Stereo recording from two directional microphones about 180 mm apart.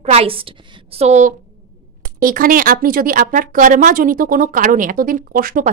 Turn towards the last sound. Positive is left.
turn(degrees=-50)  # may be behind; listen again after turning